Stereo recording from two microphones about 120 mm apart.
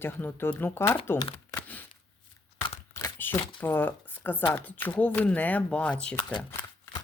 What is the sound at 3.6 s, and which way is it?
Speech, 15° left (ahead or behind).